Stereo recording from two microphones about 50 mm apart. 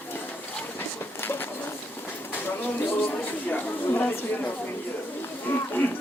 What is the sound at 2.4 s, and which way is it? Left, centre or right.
Speech, left.